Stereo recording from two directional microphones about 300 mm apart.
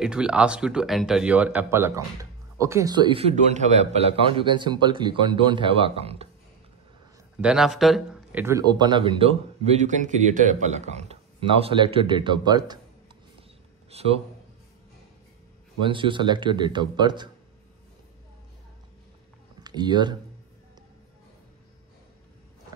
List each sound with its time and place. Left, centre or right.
0.0 s a man's voice: centre
7.3 s a man's voice: centre
13.4 s a sound: centre
15.8 s a man's voice: centre
19.6 s speech: centre